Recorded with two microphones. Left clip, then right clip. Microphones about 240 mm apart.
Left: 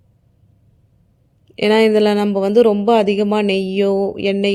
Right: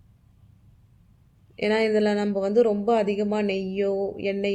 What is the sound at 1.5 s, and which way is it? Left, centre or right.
A man's voice, left.